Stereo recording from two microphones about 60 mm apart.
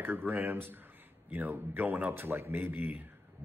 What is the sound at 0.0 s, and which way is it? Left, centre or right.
Speech, right.